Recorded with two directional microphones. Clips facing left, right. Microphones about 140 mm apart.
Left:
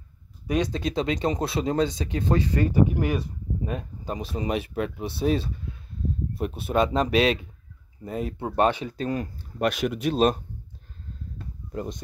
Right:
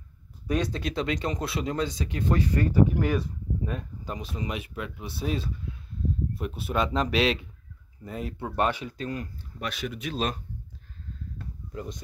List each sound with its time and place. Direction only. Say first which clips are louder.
0.5 s speech: left 3 dB; 15° left (ahead or behind); by 7.3 s 40° left (ahead or behind)
8.0 s speech: left 4 dB; 25° left (ahead or behind)
9.6 s speech: left 9 dB; 60° left (ahead or behind)